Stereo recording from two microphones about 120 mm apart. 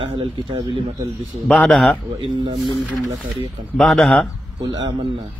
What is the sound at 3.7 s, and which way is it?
Speech, centre (ahead or behind).